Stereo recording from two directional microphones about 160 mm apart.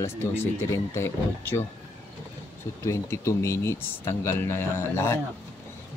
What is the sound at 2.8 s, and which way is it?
Speech, 20° left (ahead or behind).